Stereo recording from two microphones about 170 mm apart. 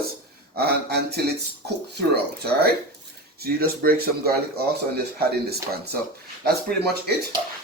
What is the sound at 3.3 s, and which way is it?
Speech, 65° right (ahead or behind).